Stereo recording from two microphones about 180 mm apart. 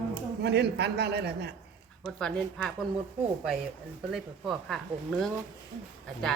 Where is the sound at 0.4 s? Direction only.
65° right (ahead or behind).